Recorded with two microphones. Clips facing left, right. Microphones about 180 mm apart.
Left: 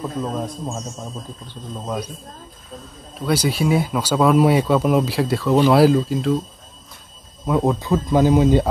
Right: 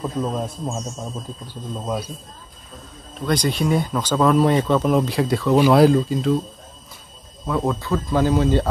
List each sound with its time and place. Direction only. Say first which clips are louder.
0.2 s speech: right 1 dB; centre (ahead or behind)
3.2 s speech: left 1 dB; 5° left (ahead or behind)
7.4 s speech: left 3 dB; 20° left (ahead or behind)